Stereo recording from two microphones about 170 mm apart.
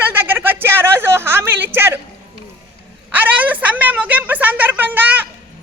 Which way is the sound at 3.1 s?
10° right (ahead or behind).